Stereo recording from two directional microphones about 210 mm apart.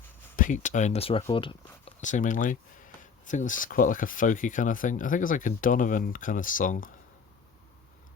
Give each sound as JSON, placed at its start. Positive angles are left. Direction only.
{"t": 0.3, "sound": "speech", "side_deg": 40}
{"t": 2.0, "sound": "speech", "side_deg": 35}